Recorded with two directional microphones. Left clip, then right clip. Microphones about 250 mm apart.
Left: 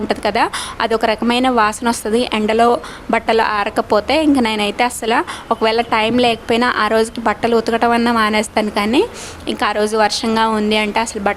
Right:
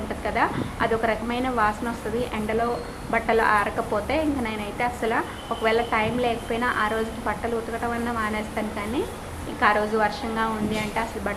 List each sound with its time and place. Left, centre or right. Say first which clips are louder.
0.1 s a woman's voice: left 8 dB; left